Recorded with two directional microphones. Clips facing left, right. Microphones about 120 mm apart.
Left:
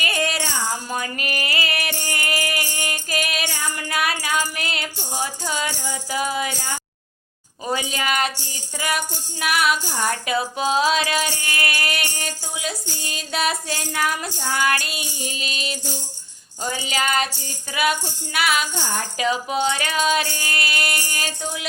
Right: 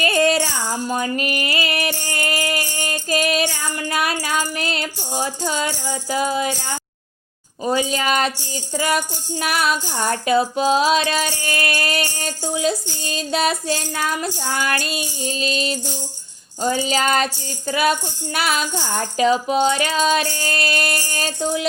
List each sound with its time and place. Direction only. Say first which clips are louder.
0.0 s music: right 7 dB; 30° right (ahead or behind)
7.6 s music: right 5 dB; 25° right (ahead or behind)